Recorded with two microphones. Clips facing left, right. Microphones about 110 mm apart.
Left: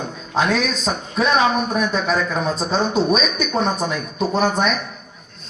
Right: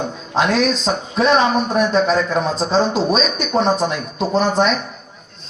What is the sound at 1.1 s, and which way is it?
A man's voice, 35° right (ahead or behind).